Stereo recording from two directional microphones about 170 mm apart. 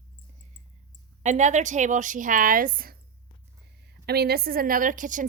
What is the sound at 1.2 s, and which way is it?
A woman's voice, 45° right (ahead or behind).